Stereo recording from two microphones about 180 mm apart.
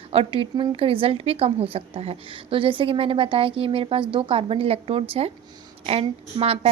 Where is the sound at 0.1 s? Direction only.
30° right (ahead or behind).